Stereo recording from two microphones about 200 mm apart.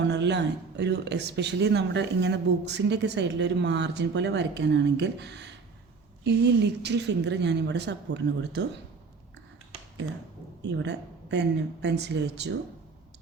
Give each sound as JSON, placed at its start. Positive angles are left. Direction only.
{"t": 0.0, "sound": "speech", "side_deg": -60}
{"t": 10.6, "sound": "speech", "side_deg": -60}